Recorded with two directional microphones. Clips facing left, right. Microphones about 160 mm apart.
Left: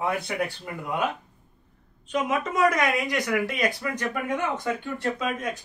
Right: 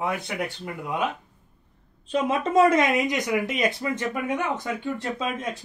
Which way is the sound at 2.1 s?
30° right (ahead or behind).